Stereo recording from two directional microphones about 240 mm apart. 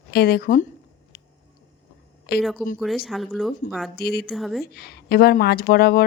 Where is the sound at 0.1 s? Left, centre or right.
Left.